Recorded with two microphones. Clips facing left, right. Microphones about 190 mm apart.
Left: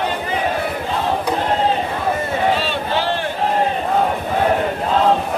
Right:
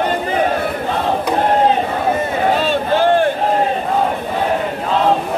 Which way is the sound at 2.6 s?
50° right (ahead or behind).